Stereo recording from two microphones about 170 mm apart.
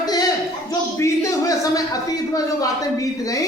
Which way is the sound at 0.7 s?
20° left (ahead or behind).